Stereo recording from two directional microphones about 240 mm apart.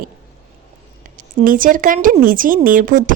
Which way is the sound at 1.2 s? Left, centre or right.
Right.